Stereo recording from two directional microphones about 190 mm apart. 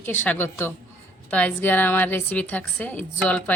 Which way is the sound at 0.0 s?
10° left (ahead or behind).